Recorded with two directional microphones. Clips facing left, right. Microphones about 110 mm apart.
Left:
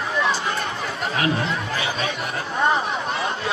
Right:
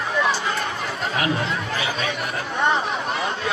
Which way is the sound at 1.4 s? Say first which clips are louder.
Even; 30° left (ahead or behind).